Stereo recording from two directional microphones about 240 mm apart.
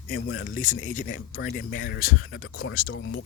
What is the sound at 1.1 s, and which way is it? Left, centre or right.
Speech, left.